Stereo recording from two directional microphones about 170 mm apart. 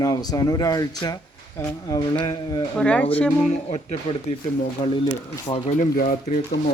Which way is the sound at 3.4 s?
40° left (ahead or behind).